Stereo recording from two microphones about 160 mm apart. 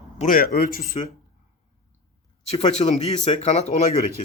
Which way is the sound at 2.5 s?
45° left (ahead or behind).